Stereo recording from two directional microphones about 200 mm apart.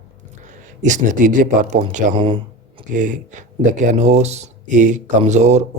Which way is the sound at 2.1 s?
25° right (ahead or behind).